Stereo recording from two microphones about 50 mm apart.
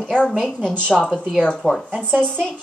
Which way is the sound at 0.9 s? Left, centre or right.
Centre.